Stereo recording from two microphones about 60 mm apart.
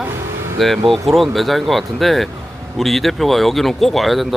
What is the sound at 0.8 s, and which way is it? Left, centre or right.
Speech, centre.